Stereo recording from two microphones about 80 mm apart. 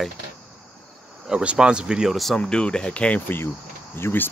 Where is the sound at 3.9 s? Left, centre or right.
Left.